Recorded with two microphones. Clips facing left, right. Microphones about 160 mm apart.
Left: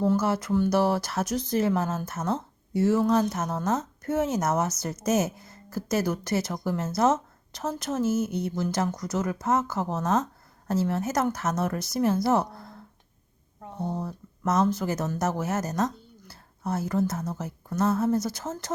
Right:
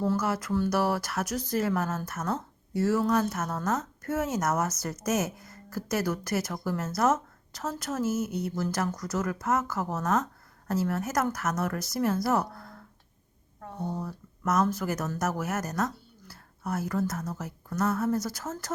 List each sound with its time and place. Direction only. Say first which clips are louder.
0.0 s speech: left 4 dB; 25° left (ahead or behind)